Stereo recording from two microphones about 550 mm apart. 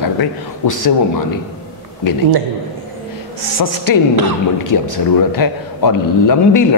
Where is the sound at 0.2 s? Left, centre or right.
Left.